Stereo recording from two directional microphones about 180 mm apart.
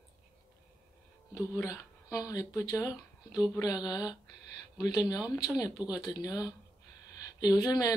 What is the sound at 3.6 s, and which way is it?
Speech, 20° left (ahead or behind).